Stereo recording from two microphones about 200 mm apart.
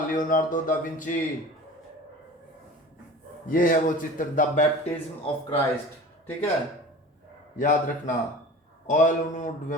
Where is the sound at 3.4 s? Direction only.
45° left (ahead or behind).